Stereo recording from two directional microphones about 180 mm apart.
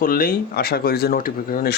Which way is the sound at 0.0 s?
55° left (ahead or behind).